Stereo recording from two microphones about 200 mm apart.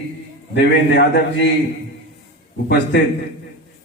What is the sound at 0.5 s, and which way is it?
A man's voice, 60° left (ahead or behind).